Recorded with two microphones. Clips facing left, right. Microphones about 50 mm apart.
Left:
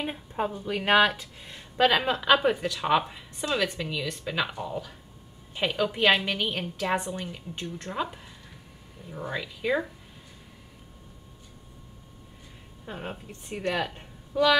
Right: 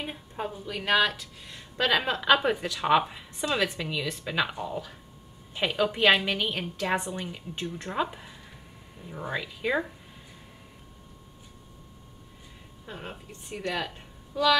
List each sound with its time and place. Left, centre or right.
0.0 s a sound: centre
0.7 s speech: centre
12.8 s speech: centre